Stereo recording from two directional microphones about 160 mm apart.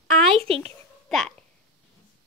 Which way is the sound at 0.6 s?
5° left (ahead or behind).